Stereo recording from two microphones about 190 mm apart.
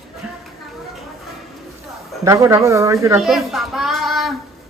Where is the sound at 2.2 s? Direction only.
15° right (ahead or behind).